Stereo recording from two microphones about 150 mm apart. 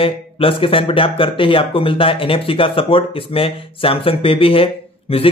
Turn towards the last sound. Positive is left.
turn(degrees=40)  # may be behind; listen again after turning